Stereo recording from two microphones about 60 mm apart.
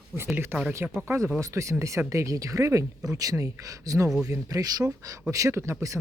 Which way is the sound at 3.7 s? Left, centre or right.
Right.